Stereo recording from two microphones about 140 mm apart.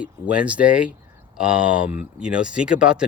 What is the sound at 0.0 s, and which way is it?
Speech, 10° right (ahead or behind).